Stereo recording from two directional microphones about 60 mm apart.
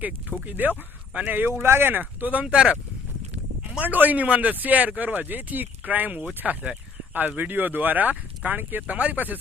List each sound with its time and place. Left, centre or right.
0.4 s speech: right
1.6 s speech: right; by 2.7 s centre
3.8 s speech: right